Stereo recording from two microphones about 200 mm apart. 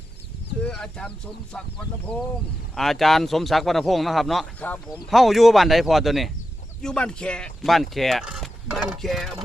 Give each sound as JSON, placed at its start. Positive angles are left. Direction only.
{"t": 0.6, "sound": "chicken", "side_deg": 5}
{"t": 1.5, "sound": "speech", "side_deg": 5}
{"t": 2.7, "sound": "speech", "side_deg": 0}